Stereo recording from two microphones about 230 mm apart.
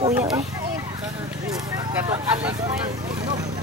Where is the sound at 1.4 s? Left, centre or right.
Centre.